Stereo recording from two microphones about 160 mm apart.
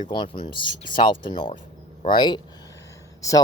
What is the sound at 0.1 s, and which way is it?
Speech, 30° left (ahead or behind).